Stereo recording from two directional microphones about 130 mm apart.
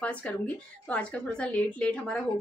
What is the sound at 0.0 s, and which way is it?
A woman's voice, 10° left (ahead or behind).